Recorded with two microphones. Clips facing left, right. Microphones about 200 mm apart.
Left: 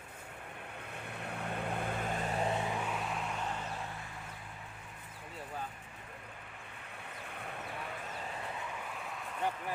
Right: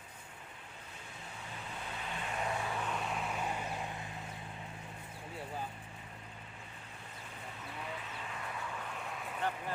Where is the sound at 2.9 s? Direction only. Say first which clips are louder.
Even; centre (ahead or behind); by 4.1 s 15° right (ahead or behind).